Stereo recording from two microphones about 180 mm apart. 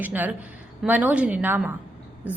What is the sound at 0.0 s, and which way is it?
A woman's voice, 10° right (ahead or behind).